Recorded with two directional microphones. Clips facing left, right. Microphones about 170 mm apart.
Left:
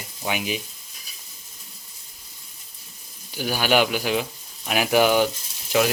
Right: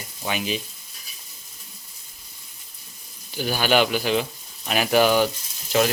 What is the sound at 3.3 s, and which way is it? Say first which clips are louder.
Speech: even; 10° left (ahead or behind).